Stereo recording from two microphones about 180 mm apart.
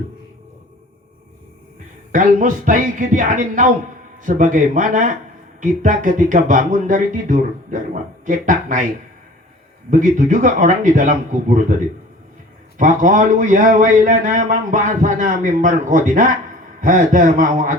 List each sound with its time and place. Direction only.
2.1 s a man's voice: 45° right (ahead or behind)
9.9 s a man's voice: 45° right (ahead or behind)